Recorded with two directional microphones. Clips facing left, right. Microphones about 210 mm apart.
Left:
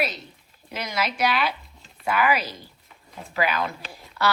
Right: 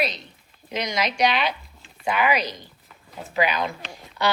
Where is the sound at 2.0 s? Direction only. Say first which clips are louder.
Even; 20° right (ahead or behind).